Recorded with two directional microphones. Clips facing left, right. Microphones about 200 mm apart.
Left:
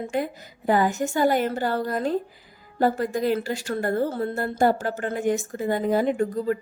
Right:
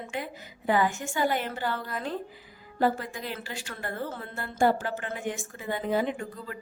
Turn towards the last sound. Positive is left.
turn(degrees=40)  # may be behind; listen again after turning